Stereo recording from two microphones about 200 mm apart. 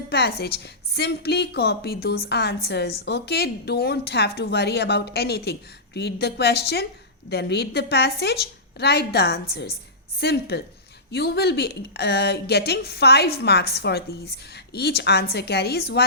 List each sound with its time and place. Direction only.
0.1 s a woman's voice: 50° left (ahead or behind)